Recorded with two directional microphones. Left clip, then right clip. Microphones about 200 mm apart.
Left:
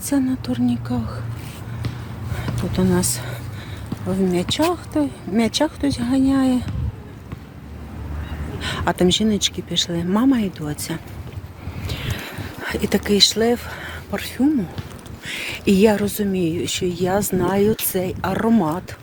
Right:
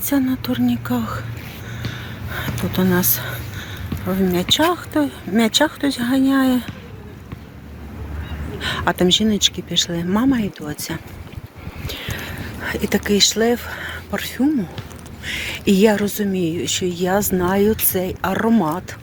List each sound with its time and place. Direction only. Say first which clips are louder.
0.1 s speech: right 2 dB; centre (ahead or behind)
2.7 s speech: right 1 dB; 5° left (ahead or behind)
8.6 s speech: right 1 dB; 5° left (ahead or behind)
11.9 s a sound: right 2 dB; 10° left (ahead or behind)
15.3 s speech: right 1 dB; 10° left (ahead or behind)